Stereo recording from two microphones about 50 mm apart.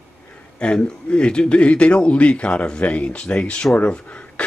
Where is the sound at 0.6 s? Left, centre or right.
Centre.